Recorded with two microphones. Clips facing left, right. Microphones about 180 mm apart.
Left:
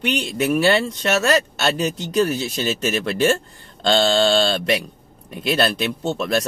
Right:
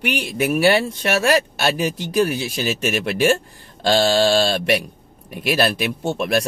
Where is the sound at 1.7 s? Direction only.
25° left (ahead or behind).